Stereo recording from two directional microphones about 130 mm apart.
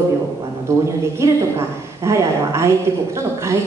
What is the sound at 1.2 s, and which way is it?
A woman's voice, 20° right (ahead or behind).